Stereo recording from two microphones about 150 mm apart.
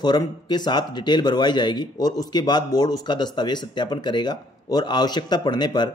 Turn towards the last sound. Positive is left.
turn(degrees=30)  # may be behind; listen again after turning